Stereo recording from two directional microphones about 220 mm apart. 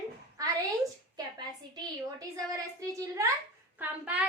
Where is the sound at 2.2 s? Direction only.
15° right (ahead or behind).